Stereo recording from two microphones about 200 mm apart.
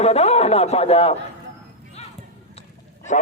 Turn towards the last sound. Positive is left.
turn(degrees=35)  # may be behind; listen again after turning